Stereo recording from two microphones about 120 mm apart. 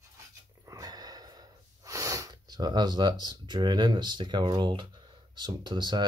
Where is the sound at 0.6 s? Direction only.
30° right (ahead or behind).